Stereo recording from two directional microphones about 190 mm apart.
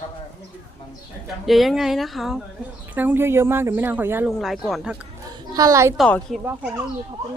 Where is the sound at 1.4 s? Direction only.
Centre (ahead or behind).